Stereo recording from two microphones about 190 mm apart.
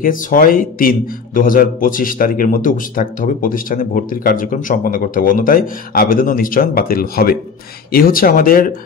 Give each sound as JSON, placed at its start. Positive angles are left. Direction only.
{"t": 0.0, "sound": "a man's voice", "side_deg": 45}